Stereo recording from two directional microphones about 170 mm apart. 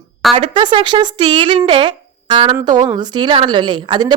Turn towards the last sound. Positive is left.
turn(degrees=-25)  # may be behind; listen again after turning